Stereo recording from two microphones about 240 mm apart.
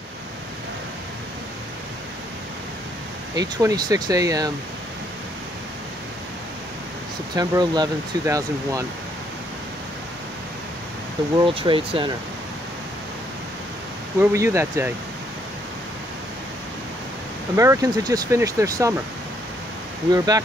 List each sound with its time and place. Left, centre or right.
3.3 s speech: centre
7.3 s speech: centre
11.3 s speech: right
14.2 s speech: centre
17.6 s speech: centre
20.1 s speech: centre